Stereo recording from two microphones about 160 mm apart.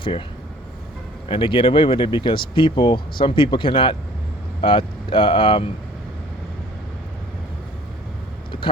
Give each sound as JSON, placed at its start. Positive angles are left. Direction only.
{"t": 1.3, "sound": "speech", "side_deg": 30}